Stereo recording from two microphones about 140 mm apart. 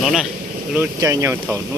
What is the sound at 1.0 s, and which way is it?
Speech, 25° right (ahead or behind).